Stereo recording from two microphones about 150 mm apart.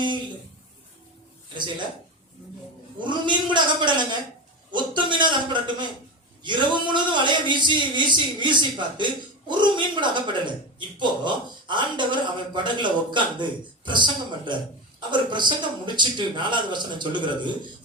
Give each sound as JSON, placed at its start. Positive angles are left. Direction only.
{"t": 3.0, "sound": "a man's voice", "side_deg": -30}